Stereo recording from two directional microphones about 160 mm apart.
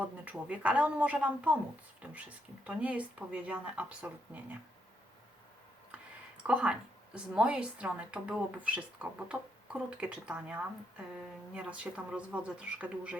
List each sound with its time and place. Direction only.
0.0 s a woman's voice: 10° right (ahead or behind)
6.5 s a woman's voice: 5° right (ahead or behind)